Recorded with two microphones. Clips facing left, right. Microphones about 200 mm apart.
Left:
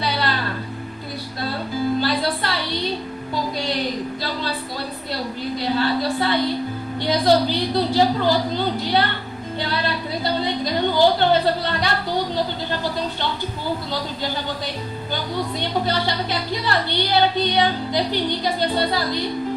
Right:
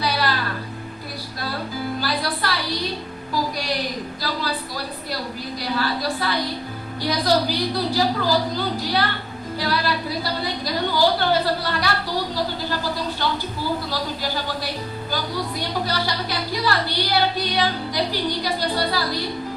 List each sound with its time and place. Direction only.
0.0 s music: 25° left (ahead or behind)
2.0 s music: 25° left (ahead or behind)
5.6 s music: 25° left (ahead or behind)
9.6 s a sound: 25° left (ahead or behind)
15.9 s music: 25° left (ahead or behind)